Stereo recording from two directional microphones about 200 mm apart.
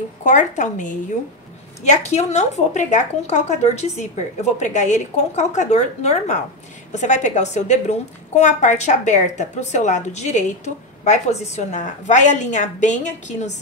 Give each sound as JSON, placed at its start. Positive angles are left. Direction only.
{"t": 0.2, "sound": "a woman's voice", "side_deg": 40}